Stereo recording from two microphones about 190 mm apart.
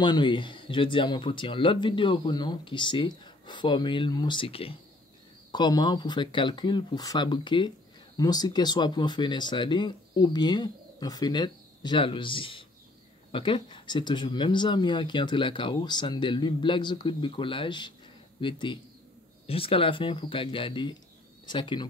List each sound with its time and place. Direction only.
0.0 s speech: 25° left (ahead or behind)